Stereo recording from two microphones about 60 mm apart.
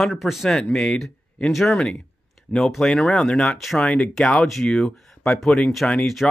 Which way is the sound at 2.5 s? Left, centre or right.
Centre.